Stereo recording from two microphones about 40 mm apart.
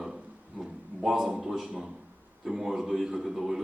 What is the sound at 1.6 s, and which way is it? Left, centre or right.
Speech, centre.